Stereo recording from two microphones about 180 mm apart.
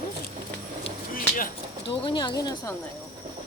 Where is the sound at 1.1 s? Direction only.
50° left (ahead or behind).